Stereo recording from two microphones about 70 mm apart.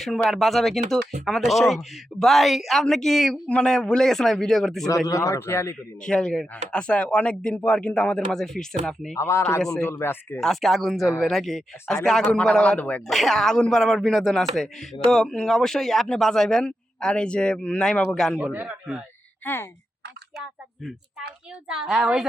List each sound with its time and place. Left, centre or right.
0.0 s speech: centre
5.0 s speech: left
5.4 s speech: left
6.0 s speech: centre
9.1 s speech: left
10.4 s speech: centre
13.1 s speech: centre
18.5 s speech: right
19.4 s speech: left
21.7 s a woman's voice: centre